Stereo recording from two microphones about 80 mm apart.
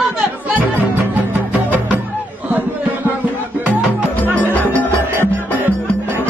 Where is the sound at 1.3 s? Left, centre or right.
Centre.